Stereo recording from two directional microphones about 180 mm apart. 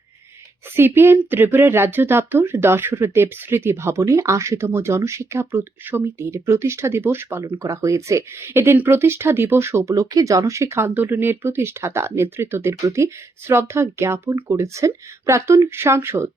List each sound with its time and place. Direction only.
0.8 s speech: 10° right (ahead or behind)